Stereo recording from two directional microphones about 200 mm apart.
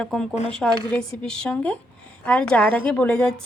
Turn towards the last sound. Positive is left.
turn(degrees=5)  # may be behind; listen again after turning